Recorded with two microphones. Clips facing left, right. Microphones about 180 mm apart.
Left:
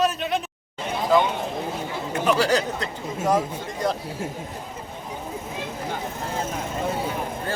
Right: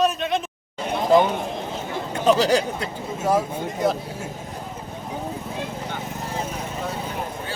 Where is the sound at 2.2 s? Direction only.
15° right (ahead or behind).